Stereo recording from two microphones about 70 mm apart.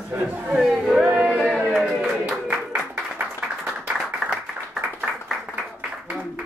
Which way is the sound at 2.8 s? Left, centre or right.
Right.